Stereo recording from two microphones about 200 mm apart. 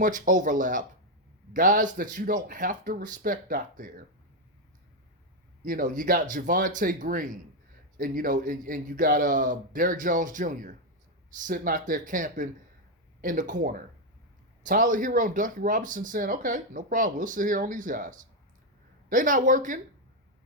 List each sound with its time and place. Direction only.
0.0 s speech: 40° right (ahead or behind)
5.6 s speech: 40° right (ahead or behind)